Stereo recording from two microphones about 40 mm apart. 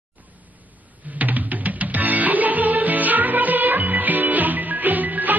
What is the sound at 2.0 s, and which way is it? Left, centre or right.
Music, right.